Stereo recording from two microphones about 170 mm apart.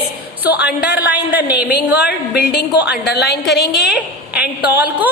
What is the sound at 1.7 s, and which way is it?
A woman's voice, 70° left (ahead or behind).